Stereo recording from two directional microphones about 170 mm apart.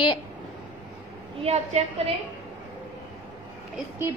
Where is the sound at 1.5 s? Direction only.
40° right (ahead or behind).